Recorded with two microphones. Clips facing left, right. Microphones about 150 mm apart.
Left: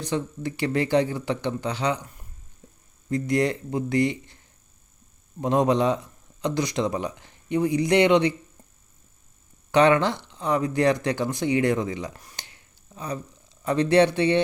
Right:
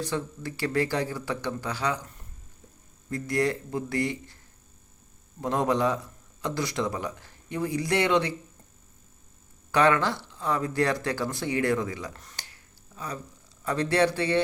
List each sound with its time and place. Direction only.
0.0 s speech: 20° left (ahead or behind)
3.1 s speech: 20° left (ahead or behind)
5.4 s speech: 20° left (ahead or behind)
9.7 s speech: 20° left (ahead or behind)
13.7 s speech: 20° left (ahead or behind)